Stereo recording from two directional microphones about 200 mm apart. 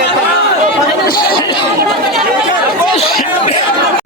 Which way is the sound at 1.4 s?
25° left (ahead or behind).